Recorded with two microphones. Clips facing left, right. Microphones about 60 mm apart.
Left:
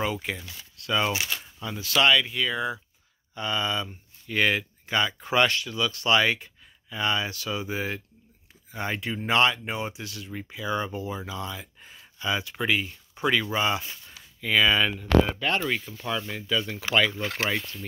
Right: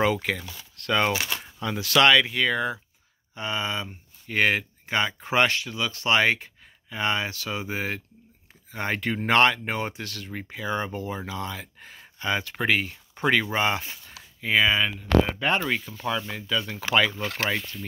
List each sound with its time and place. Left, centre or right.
0.0 s speech: right
1.4 s speech: right
3.3 s speech: right
8.7 s speech: right
14.4 s speech: right
14.8 s speech: centre
15.3 s speech: centre
15.6 s speech: centre